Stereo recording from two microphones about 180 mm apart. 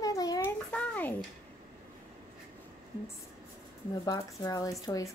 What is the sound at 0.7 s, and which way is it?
Speech, 10° left (ahead or behind).